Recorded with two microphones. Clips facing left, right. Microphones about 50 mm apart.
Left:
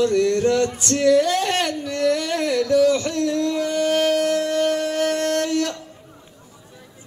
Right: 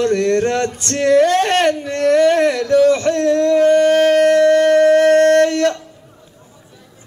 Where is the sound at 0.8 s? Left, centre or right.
Right.